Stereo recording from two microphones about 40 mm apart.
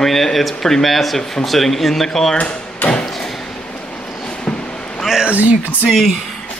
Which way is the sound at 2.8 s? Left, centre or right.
Left.